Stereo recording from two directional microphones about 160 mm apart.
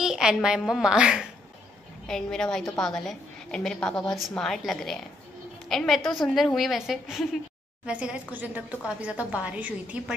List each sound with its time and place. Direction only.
0.0 s a woman's voice: 5° right (ahead or behind)